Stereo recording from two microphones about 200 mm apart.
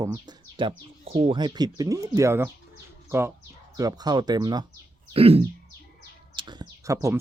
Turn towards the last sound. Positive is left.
turn(degrees=-15)  # may be behind; listen again after turning